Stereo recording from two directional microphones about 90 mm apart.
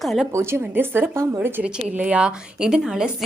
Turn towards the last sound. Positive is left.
turn(degrees=0)  # may be behind; listen again after turning